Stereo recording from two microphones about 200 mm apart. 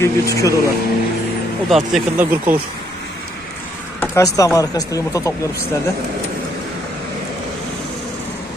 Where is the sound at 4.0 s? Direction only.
15° left (ahead or behind).